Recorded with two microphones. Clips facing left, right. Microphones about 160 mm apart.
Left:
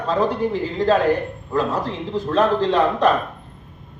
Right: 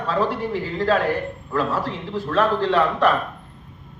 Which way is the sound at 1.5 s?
20° left (ahead or behind).